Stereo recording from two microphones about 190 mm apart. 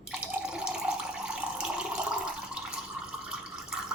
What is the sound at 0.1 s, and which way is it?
Water tap, 5° right (ahead or behind).